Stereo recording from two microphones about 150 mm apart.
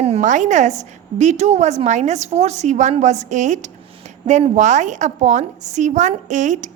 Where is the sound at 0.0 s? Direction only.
50° right (ahead or behind).